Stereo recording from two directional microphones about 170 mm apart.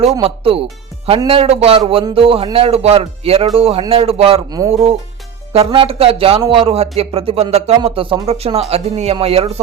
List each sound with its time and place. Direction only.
0.2 s speech: 35° right (ahead or behind)